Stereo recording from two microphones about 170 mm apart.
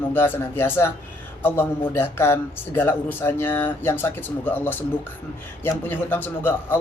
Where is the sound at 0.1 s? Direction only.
15° left (ahead or behind).